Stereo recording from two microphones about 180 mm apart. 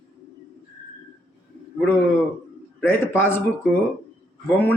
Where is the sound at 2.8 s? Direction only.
10° left (ahead or behind).